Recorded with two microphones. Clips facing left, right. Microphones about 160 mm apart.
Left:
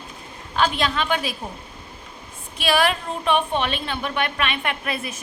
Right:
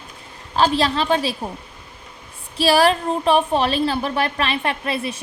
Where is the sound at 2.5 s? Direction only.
35° right (ahead or behind).